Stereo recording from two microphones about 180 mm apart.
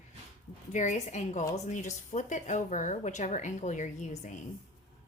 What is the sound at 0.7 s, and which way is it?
A woman's voice, 40° left (ahead or behind).